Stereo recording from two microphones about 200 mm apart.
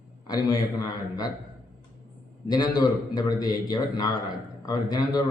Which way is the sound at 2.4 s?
20° left (ahead or behind).